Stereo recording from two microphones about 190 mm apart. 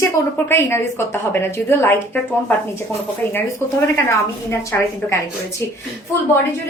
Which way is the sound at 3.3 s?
10° left (ahead or behind).